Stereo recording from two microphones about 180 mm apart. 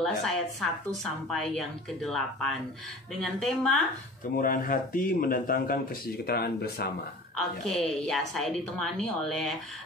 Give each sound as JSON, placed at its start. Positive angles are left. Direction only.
{"t": 0.0, "sound": "a woman's voice", "side_deg": 0}
{"t": 4.4, "sound": "a man's voice", "side_deg": 50}
{"t": 7.6, "sound": "a woman's voice", "side_deg": 0}